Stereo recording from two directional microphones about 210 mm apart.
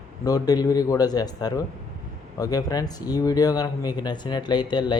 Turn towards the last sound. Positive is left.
turn(degrees=20)  # may be behind; listen again after turning